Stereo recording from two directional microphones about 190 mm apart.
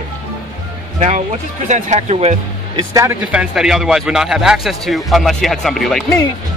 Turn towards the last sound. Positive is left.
turn(degrees=0)  # may be behind; listen again after turning